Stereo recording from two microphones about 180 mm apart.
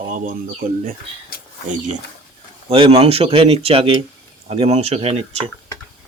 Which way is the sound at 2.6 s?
30° right (ahead or behind).